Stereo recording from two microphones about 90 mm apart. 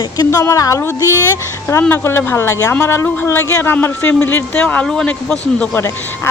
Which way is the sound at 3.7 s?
20° left (ahead or behind).